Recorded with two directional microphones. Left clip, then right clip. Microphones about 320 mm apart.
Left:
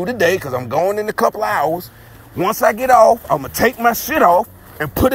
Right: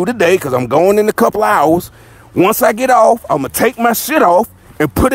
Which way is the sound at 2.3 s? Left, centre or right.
Right.